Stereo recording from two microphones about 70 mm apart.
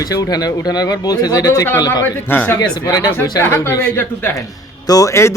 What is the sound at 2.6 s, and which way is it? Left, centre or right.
Speech, left.